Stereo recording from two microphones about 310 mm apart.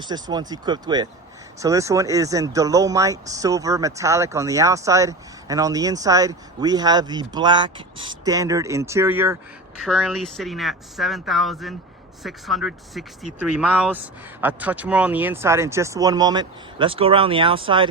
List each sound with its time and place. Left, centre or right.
0.1 s speech: centre